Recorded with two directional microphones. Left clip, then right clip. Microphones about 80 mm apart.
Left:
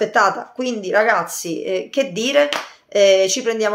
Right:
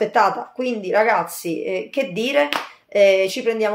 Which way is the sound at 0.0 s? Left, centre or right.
Left.